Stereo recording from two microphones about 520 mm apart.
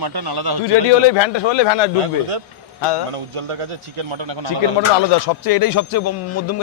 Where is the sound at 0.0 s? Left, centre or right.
Right.